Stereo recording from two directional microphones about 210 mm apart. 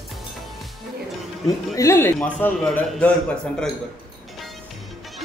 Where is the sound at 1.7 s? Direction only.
15° left (ahead or behind).